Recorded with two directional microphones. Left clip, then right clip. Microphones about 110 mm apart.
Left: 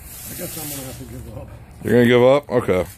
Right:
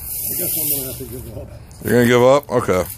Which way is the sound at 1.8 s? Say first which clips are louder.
Right 1 dB; 25° left (ahead or behind).